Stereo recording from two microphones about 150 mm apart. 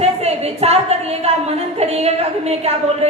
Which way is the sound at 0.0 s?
45° right (ahead or behind).